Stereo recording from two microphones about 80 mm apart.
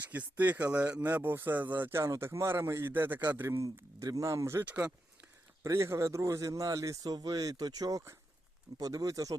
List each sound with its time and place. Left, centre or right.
0.0 s speech: right
4.6 s speech: centre
5.6 s a man's voice: right